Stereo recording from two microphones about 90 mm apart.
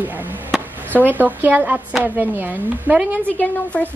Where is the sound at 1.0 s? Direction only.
20° right (ahead or behind).